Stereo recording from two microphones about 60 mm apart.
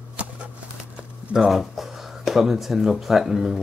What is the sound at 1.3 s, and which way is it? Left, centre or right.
Speech, centre.